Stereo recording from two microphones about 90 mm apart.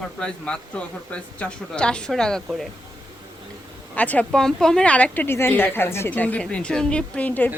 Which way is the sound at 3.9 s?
15° left (ahead or behind).